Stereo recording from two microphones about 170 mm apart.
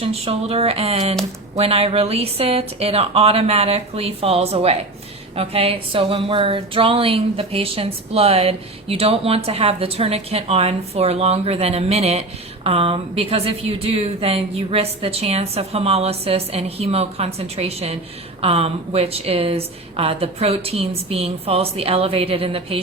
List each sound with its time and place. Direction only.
0.0 s speech: 35° right (ahead or behind)